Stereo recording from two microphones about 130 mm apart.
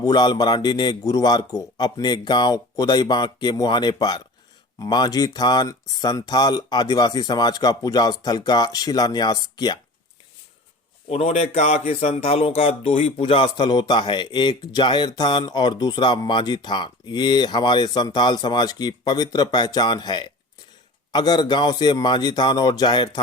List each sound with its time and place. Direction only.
0.0 s speech: 35° left (ahead or behind)
11.1 s speech: 55° left (ahead or behind); by 23.2 s 35° left (ahead or behind)